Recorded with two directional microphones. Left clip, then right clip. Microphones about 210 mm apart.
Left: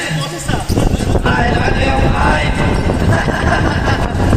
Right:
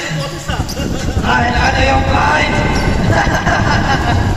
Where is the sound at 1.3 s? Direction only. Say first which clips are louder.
Right 3 dB; 35° left (ahead or behind).